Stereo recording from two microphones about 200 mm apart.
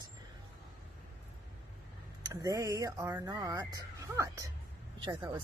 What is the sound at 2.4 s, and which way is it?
Speech, 15° right (ahead or behind).